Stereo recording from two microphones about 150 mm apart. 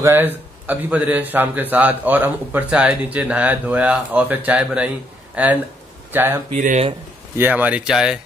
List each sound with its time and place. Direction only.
0.0 s a man's voice: 15° right (ahead or behind)
6.5 s speech: 55° right (ahead or behind)
7.3 s a man's voice: 10° right (ahead or behind)